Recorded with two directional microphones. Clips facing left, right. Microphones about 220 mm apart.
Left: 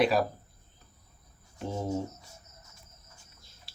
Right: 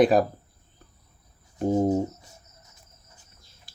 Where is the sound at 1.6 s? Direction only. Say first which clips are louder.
Right 10 dB; 45° right (ahead or behind).